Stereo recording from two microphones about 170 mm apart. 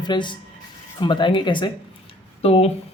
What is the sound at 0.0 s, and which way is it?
Speech, 25° left (ahead or behind).